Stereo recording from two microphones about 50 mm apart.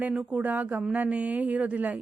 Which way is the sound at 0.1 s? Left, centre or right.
Centre.